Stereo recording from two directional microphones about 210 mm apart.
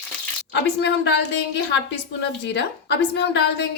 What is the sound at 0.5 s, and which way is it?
A woman's voice, 55° left (ahead or behind).